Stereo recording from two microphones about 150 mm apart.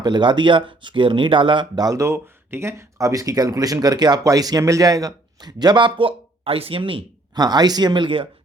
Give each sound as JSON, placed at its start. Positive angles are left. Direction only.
{"t": 0.0, "sound": "speech", "side_deg": -30}